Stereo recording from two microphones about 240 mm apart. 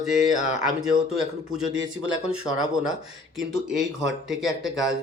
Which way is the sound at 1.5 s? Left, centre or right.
Right.